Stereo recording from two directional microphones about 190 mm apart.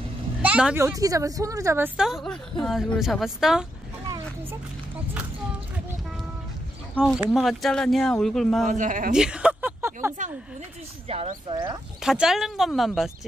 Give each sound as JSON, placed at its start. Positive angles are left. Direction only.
{"t": 0.4, "sound": "speech", "side_deg": -5}
{"t": 2.0, "sound": "speech", "side_deg": 0}
{"t": 7.0, "sound": "speech", "side_deg": -5}
{"t": 8.6, "sound": "speech", "side_deg": -40}
{"t": 9.1, "sound": "a sound", "side_deg": -5}
{"t": 11.1, "sound": "speech", "side_deg": -30}
{"t": 12.0, "sound": "speech", "side_deg": 0}